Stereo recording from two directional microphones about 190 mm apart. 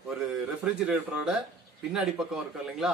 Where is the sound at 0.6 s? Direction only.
5° right (ahead or behind).